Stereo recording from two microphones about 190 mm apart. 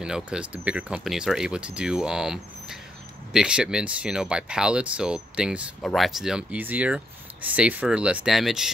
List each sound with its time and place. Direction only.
0.0 s speech: 5° right (ahead or behind)